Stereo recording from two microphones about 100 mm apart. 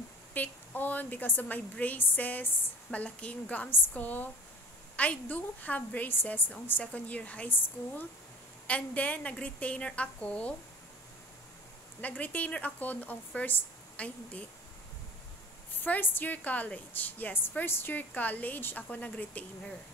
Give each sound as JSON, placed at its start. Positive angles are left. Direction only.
{"t": 0.3, "sound": "a woman's voice", "side_deg": 15}
{"t": 12.0, "sound": "a woman's voice", "side_deg": 15}
{"t": 15.8, "sound": "a woman's voice", "side_deg": 20}